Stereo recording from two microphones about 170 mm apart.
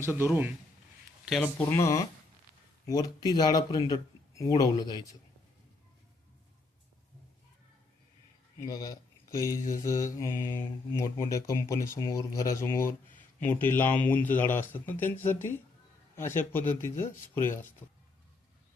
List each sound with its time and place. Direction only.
0.0 s a man's voice: 15° right (ahead or behind)
1.3 s speech: 10° left (ahead or behind); by 5.1 s 25° left (ahead or behind)
8.6 s speech: 20° left (ahead or behind)